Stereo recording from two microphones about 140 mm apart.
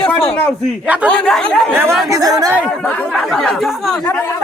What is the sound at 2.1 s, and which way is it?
Speech, 25° right (ahead or behind).